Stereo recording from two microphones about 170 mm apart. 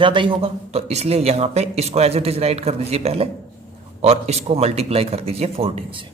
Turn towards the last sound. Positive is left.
turn(degrees=-35)  # may be behind; listen again after turning